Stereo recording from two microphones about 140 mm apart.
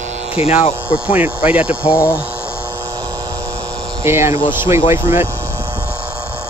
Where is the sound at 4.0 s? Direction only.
20° right (ahead or behind).